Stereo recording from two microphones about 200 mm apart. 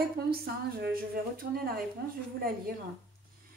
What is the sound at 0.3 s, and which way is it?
Speech, 50° right (ahead or behind).